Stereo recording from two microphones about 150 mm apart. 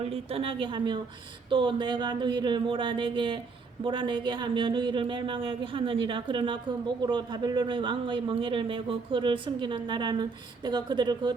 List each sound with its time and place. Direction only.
0.0 s speech: 40° right (ahead or behind)